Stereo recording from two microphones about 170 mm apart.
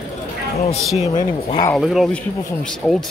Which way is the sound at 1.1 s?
25° left (ahead or behind).